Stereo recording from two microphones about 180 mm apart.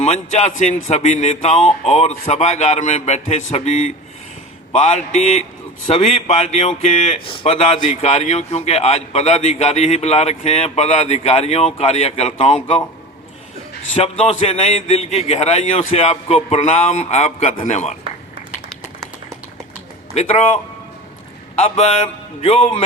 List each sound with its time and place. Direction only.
0.0 s a man's voice: 40° left (ahead or behind)
13.9 s a man's voice: 35° left (ahead or behind)
20.1 s a man's voice: 40° left (ahead or behind)
21.6 s a man's voice: 35° left (ahead or behind)